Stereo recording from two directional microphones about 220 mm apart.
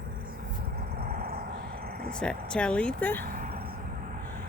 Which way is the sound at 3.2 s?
35° right (ahead or behind).